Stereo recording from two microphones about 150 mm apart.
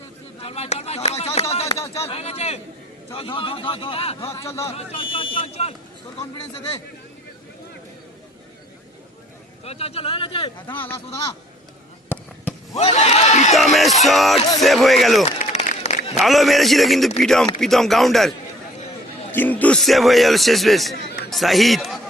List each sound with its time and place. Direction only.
0.4 s a sound: 45° left (ahead or behind)
1.6 s a sound: 20° left (ahead or behind)
1.9 s speech: 40° left (ahead or behind)
4.4 s a man's voice: 20° left (ahead or behind)
4.7 s speech: 40° left (ahead or behind)
9.6 s speech: 40° left (ahead or behind)
10.8 s speech: 15° left (ahead or behind)
12.0 s fireworks: 10° left (ahead or behind)
12.7 s speech: 45° left (ahead or behind)
13.5 s a man's voice: centre (ahead or behind)
15.2 s a sound: 50° left (ahead or behind)
16.2 s a man's voice: centre (ahead or behind)
19.3 s a man's voice: 10° left (ahead or behind)